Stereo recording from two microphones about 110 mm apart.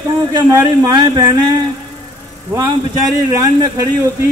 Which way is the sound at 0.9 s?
40° right (ahead or behind).